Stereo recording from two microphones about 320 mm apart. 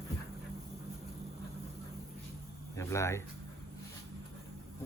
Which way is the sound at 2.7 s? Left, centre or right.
Centre.